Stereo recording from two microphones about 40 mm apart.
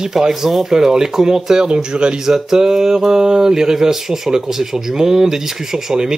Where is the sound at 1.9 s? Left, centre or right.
Right.